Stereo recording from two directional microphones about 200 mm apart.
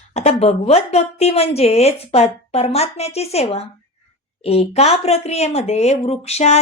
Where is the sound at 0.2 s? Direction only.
30° left (ahead or behind).